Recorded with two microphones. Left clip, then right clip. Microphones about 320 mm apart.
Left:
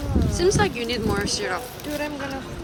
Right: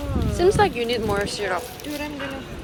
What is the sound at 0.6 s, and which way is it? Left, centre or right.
Speech, centre.